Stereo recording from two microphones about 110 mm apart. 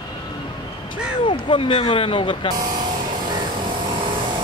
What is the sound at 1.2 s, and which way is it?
Speech, 50° left (ahead or behind).